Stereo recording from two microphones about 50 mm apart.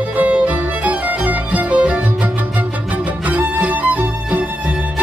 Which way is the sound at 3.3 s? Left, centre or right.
Right.